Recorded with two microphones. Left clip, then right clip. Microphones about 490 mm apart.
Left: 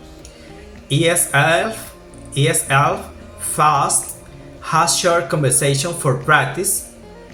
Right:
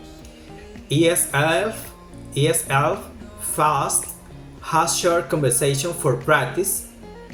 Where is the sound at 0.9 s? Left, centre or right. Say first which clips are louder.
Left 2 dB; right.